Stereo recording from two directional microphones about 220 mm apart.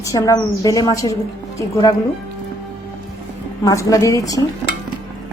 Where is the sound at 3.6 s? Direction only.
15° left (ahead or behind).